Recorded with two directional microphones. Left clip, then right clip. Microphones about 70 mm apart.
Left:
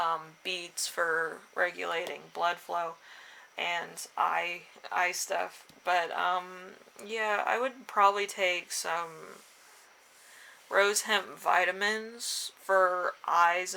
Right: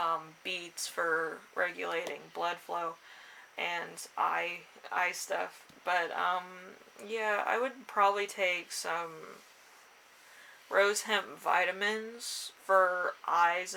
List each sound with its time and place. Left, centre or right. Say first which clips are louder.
0.4 s speech: left 3 dB; left
10.7 s speech: left 2 dB; left